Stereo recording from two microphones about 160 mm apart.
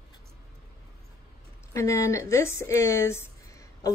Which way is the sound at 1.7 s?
20° left (ahead or behind).